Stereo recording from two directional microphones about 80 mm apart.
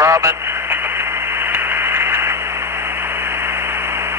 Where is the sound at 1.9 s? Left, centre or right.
Right.